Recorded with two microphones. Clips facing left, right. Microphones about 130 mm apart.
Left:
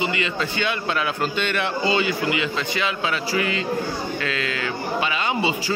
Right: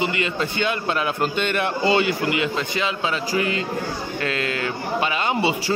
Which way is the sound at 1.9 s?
55° right (ahead or behind).